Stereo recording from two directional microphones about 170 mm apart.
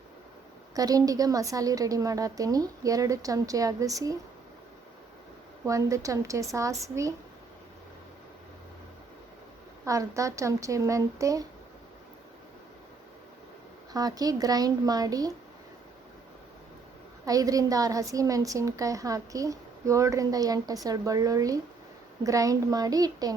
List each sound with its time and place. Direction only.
0.8 s a woman's voice: 20° right (ahead or behind)
5.6 s a woman's voice: 20° right (ahead or behind)
9.8 s a woman's voice: 20° right (ahead or behind)
13.9 s a woman's voice: 20° right (ahead or behind)
17.2 s a woman's voice: 20° right (ahead or behind)